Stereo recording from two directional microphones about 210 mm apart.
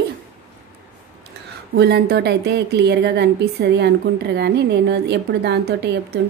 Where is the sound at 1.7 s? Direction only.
50° right (ahead or behind).